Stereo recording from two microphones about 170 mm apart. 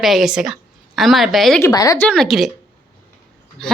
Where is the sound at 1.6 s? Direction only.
20° left (ahead or behind).